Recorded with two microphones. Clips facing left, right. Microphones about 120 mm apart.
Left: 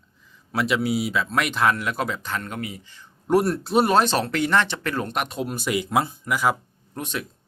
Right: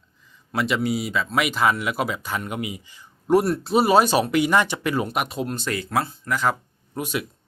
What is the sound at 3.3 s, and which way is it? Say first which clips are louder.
Speech: right 1 dB; centre (ahead or behind).